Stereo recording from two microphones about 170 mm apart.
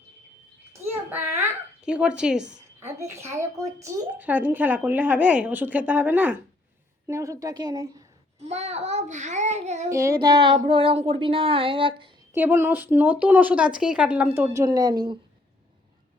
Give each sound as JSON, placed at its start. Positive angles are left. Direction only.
{"t": 1.4, "sound": "speech", "side_deg": -5}
{"t": 2.5, "sound": "a woman's voice", "side_deg": -15}
{"t": 8.4, "sound": "child singing", "side_deg": -40}
{"t": 9.9, "sound": "a woman's voice", "side_deg": -15}
{"t": 12.3, "sound": "a woman's voice", "side_deg": -10}